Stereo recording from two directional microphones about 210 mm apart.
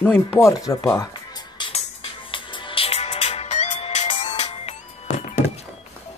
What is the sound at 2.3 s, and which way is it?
Music, 25° left (ahead or behind).